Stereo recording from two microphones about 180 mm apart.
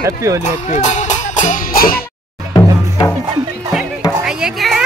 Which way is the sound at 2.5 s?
20° left (ahead or behind).